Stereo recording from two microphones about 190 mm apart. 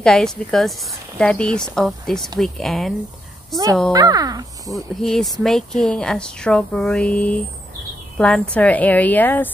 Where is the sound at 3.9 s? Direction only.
20° right (ahead or behind).